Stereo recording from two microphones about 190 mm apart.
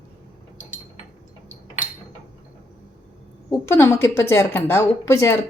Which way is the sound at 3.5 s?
15° left (ahead or behind).